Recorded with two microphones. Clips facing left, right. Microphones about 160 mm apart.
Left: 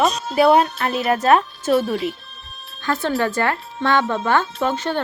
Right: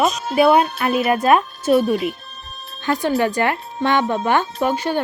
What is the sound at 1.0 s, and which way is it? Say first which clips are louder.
Speech: even; 10° right (ahead or behind).